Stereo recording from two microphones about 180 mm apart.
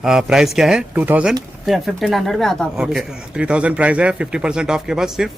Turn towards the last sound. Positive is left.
turn(degrees=-5)  # may be behind; listen again after turning